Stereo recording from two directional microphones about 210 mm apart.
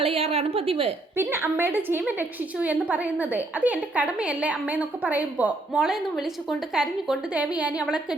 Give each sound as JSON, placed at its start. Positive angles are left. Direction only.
{"t": 0.0, "sound": "a woman's voice", "side_deg": -25}
{"t": 1.1, "sound": "a woman's voice", "side_deg": -10}